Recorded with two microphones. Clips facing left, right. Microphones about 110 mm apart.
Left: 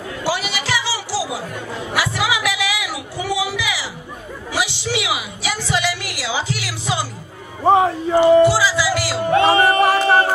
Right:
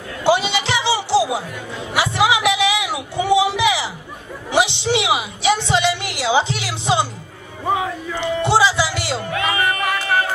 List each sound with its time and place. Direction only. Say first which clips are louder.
0.2 s a sound: right 6 dB; 25° right (ahead or behind)
7.6 s a man's voice: left 7 dB; 40° left (ahead or behind)
8.4 s music: left 2 dB; 25° right (ahead or behind)
9.3 s music: left 9 dB; 30° left (ahead or behind)